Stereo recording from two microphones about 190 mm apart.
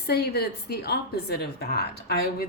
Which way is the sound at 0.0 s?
55° left (ahead or behind).